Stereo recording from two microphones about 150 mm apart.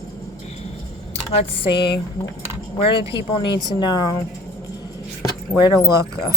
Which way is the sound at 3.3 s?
30° left (ahead or behind).